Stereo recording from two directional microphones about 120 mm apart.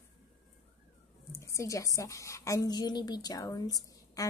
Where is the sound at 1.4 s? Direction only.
25° left (ahead or behind).